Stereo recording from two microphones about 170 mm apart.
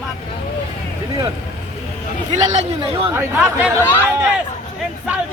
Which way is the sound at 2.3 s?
40° right (ahead or behind).